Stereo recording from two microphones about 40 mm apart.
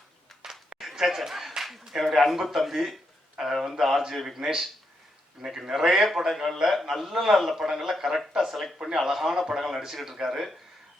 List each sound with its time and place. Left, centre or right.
0.8 s a sound: centre
2.0 s a man's voice: centre
4.4 s a man's voice: centre